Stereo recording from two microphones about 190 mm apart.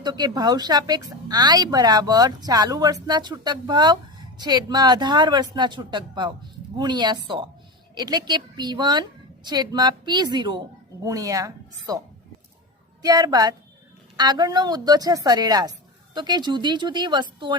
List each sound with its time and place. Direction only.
0.0 s a woman's voice: 20° right (ahead or behind)
13.0 s a woman's voice: 20° right (ahead or behind)